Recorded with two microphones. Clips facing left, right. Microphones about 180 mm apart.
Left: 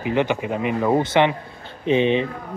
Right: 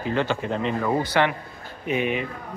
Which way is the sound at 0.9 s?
25° left (ahead or behind).